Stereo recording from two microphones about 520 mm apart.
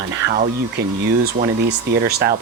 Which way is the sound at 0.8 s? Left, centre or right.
Centre.